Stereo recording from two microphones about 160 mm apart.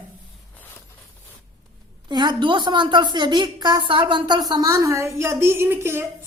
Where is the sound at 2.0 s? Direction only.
30° right (ahead or behind).